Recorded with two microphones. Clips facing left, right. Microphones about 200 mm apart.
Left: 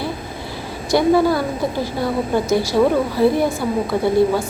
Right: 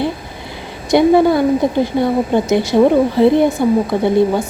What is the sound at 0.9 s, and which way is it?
A woman's voice, 20° right (ahead or behind).